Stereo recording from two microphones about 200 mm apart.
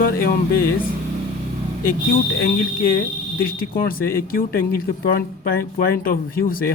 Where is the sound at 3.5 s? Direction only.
45° left (ahead or behind).